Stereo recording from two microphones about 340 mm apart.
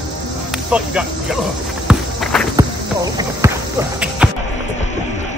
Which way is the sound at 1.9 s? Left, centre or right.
Centre.